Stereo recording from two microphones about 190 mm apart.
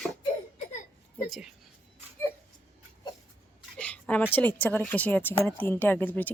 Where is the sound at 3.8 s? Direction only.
5° left (ahead or behind).